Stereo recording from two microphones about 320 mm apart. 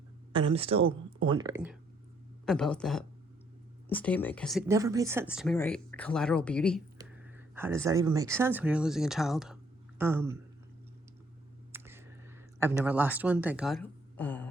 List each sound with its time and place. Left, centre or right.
0.3 s speech: centre
2.5 s speech: centre
7.0 s a sound: centre
8.4 s speech: centre
11.7 s a sound: centre
12.8 s speech: centre